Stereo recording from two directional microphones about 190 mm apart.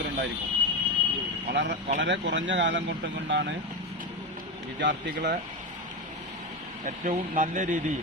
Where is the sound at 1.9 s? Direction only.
70° right (ahead or behind).